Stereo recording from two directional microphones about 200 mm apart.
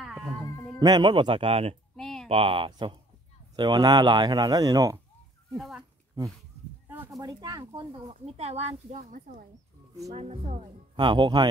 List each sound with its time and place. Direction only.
0.0 s a sound: centre (ahead or behind)
0.7 s speech: 20° right (ahead or behind)
2.0 s a sound: centre (ahead or behind)
2.2 s speech: 30° right (ahead or behind)
5.6 s speech: centre (ahead or behind)
6.9 s speech: 15° right (ahead or behind)